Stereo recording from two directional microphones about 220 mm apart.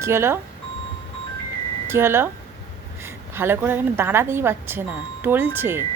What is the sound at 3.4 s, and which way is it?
Speech, 10° right (ahead or behind).